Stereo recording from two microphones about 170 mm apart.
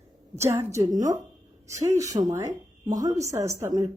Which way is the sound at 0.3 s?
15° right (ahead or behind).